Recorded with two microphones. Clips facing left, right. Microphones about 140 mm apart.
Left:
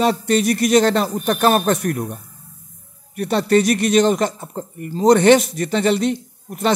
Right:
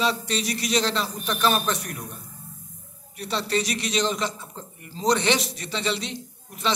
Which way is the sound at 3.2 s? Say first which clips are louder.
Left 10 dB; 55° left (ahead or behind).